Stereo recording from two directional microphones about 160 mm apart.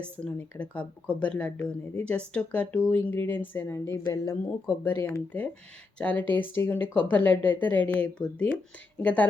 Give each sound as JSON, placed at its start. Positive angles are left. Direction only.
{"t": 0.0, "sound": "speech", "side_deg": 5}